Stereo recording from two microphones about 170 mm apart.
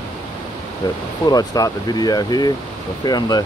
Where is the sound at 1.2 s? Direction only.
20° left (ahead or behind).